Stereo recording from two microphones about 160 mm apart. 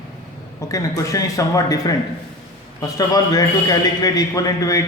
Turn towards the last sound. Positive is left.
turn(degrees=20)  # may be behind; listen again after turning